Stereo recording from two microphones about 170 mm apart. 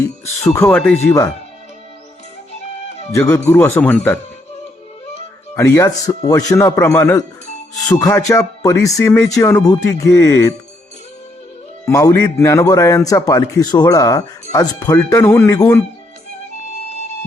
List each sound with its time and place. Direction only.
0.0 s a man's voice: 15° left (ahead or behind)
3.1 s speech: 20° left (ahead or behind)
5.5 s a man's voice: 15° left (ahead or behind)
11.9 s a man's voice: 20° left (ahead or behind)